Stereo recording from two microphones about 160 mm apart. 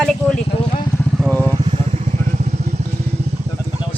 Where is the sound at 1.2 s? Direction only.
10° left (ahead or behind).